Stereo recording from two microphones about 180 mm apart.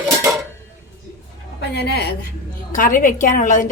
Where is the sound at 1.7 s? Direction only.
65° left (ahead or behind).